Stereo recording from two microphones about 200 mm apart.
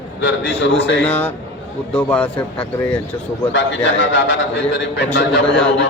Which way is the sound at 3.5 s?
65° left (ahead or behind).